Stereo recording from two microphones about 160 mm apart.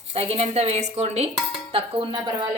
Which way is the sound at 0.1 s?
35° right (ahead or behind).